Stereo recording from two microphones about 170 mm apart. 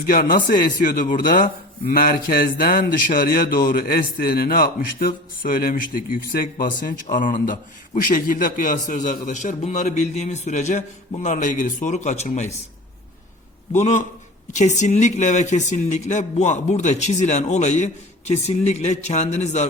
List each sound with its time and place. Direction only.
0.1 s speech: 55° left (ahead or behind)
13.7 s speech: 45° left (ahead or behind)